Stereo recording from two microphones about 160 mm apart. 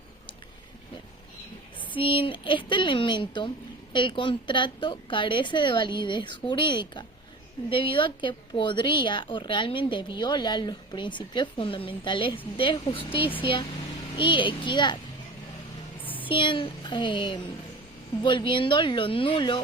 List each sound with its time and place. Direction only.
2.0 s a woman's voice: 35° left (ahead or behind)
16.0 s a sound: 10° left (ahead or behind)
16.3 s a woman's voice: 30° left (ahead or behind)